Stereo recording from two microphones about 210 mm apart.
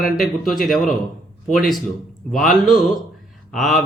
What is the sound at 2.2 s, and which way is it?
Speech, centre (ahead or behind).